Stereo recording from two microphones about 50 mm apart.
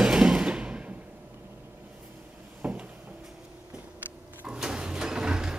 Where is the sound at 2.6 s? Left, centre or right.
Right.